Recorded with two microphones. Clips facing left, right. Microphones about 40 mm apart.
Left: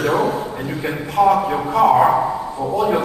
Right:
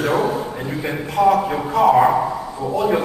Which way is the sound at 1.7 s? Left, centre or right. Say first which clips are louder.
Left 1 dB; left.